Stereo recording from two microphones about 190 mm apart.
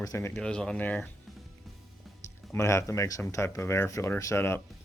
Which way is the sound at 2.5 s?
15° left (ahead or behind).